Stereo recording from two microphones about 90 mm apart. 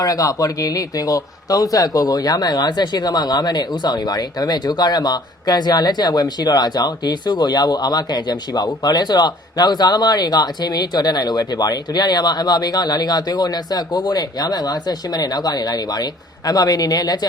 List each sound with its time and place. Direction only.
0.0 s speech: 40° left (ahead or behind)